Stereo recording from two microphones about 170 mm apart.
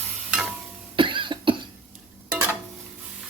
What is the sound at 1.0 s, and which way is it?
Cough, 30° right (ahead or behind).